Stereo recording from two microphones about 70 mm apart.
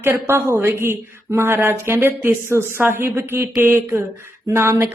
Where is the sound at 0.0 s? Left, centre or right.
Right.